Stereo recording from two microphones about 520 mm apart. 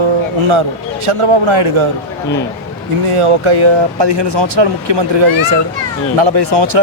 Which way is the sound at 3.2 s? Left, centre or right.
Right.